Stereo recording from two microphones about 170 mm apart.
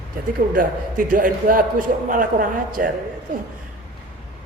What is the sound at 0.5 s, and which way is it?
A man's voice, 55° right (ahead or behind).